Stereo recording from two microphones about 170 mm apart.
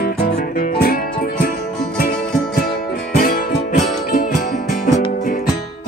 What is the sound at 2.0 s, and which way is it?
Music, 65° left (ahead or behind).